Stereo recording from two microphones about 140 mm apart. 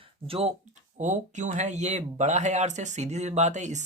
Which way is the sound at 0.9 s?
60° right (ahead or behind).